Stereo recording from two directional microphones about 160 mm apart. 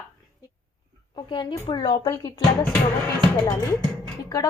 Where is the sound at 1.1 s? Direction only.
30° left (ahead or behind).